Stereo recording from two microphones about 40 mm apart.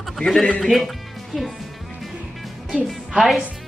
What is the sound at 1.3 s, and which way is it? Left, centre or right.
Speech, centre.